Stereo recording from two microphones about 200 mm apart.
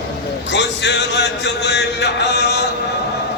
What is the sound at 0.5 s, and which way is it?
Music, 60° left (ahead or behind).